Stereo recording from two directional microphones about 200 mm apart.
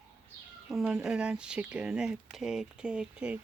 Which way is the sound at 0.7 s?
Centre (ahead or behind).